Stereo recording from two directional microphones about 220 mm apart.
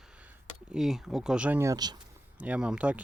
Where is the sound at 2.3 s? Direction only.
5° right (ahead or behind).